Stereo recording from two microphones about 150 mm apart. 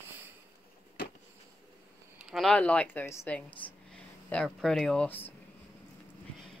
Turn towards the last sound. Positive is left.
turn(degrees=10)  # may be behind; listen again after turning